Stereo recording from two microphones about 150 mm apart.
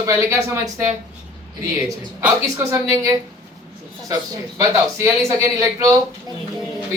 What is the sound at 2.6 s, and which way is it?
Speech, 20° right (ahead or behind).